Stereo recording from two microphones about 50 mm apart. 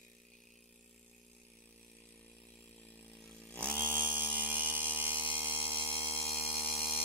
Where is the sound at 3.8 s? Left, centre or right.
Right.